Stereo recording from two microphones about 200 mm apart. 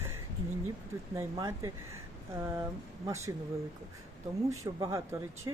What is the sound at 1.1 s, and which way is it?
Speech, 15° right (ahead or behind).